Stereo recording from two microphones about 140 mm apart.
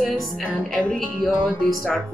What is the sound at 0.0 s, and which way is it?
Speech, 5° left (ahead or behind).